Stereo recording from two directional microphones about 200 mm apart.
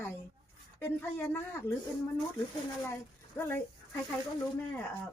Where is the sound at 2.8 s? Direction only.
10° left (ahead or behind).